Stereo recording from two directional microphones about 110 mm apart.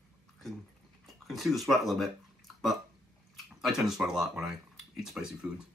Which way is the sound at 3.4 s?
5° right (ahead or behind).